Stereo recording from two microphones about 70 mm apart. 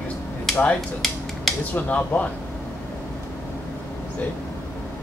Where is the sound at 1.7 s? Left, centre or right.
Left.